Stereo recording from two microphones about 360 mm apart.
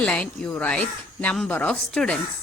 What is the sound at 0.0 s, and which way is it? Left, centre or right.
A woman's voice, centre.